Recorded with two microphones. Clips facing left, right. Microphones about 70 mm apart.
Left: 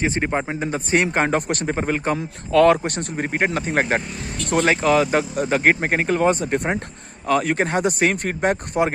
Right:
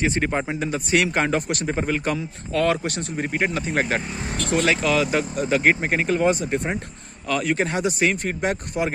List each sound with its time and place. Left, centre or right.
0.0 s speech: left
2.1 s speech: left
2.8 s speech: left
7.2 s speech: left